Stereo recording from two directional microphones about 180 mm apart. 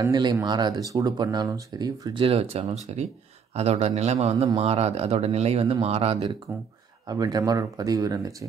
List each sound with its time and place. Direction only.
0.0 s speech: 20° right (ahead or behind)
7.1 s speech: 20° right (ahead or behind)